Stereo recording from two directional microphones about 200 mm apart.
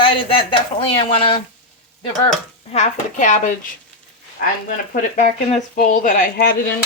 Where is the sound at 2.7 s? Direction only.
35° left (ahead or behind).